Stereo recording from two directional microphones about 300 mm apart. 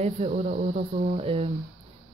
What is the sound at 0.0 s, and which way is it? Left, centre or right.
Speech, right.